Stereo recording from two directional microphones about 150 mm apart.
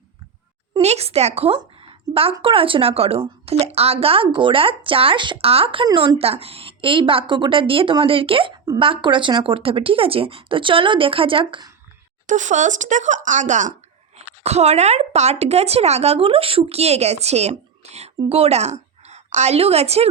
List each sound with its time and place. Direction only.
0.8 s a woman's voice: 45° right (ahead or behind)
12.2 s a woman's voice: 55° right (ahead or behind)